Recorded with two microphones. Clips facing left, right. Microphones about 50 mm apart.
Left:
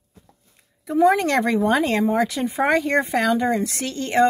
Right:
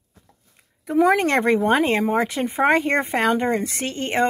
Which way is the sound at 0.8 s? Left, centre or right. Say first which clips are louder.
Left 1 dB; right.